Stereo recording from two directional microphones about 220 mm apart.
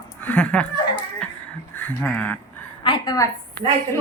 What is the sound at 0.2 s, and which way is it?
Chuckle, 10° left (ahead or behind).